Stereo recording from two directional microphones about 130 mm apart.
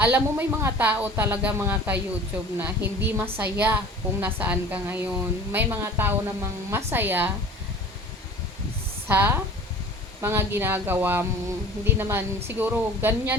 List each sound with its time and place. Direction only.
0.0 s a woman's voice: 15° right (ahead or behind)
9.0 s a woman's voice: 15° right (ahead or behind)